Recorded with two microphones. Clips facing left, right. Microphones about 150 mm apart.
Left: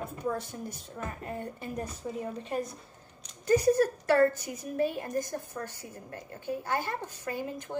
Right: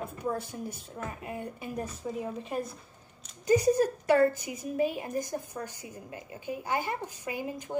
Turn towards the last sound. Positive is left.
turn(degrees=-15)  # may be behind; listen again after turning